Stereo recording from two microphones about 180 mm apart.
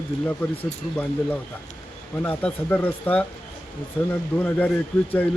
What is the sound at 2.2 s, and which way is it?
Speech, 10° left (ahead or behind).